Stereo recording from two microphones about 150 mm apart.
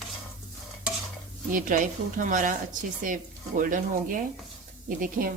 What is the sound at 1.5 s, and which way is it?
Speech, 65° right (ahead or behind).